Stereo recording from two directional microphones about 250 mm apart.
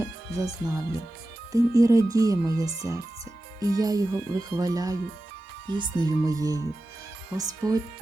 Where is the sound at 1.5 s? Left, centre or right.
Centre.